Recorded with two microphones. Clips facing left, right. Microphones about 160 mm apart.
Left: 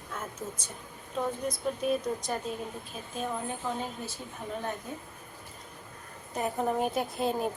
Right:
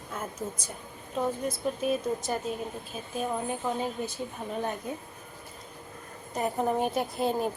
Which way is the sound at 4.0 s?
20° right (ahead or behind).